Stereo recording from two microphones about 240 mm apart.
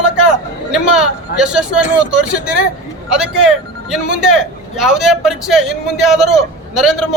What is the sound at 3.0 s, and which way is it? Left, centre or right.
A man's voice, centre.